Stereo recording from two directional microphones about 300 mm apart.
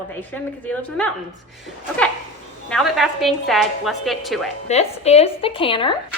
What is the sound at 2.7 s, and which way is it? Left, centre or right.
A woman's voice, centre.